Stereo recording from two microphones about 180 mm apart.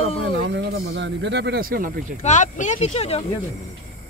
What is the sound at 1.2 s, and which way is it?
Speech, 70° right (ahead or behind).